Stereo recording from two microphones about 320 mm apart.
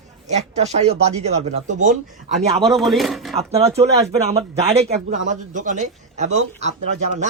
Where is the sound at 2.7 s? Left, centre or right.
Centre.